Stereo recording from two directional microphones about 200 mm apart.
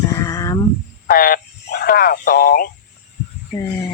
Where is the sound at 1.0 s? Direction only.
45° left (ahead or behind).